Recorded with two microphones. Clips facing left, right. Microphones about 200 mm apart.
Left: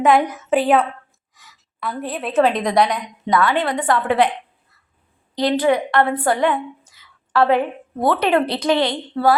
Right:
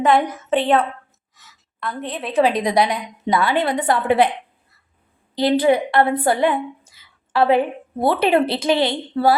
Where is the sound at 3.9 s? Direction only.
10° right (ahead or behind).